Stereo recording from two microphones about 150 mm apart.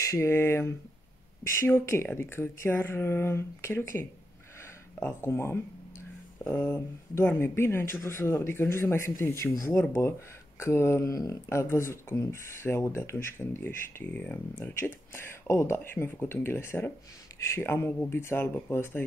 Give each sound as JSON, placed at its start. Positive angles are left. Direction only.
{"t": 0.0, "sound": "speech", "side_deg": 20}